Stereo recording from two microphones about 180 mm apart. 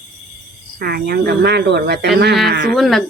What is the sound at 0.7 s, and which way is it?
Speech, 60° right (ahead or behind).